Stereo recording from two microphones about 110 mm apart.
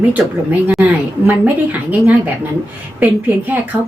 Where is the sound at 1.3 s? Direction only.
15° right (ahead or behind).